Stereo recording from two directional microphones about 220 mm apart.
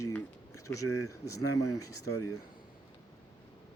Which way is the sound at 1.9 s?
85° left.